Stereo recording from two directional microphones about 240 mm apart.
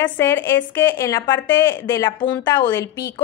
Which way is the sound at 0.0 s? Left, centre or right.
Centre.